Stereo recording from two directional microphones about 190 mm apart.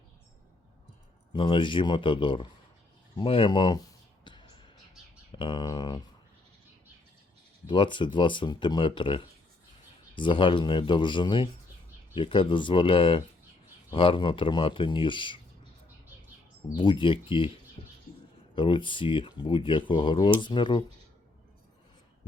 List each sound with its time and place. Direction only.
1.3 s speech: 25° left (ahead or behind)
4.2 s music: 25° left (ahead or behind)
5.3 s speech: 25° left (ahead or behind)
7.7 s speech: 25° left (ahead or behind)
16.7 s speech: 25° left (ahead or behind)
18.5 s speech: 25° left (ahead or behind)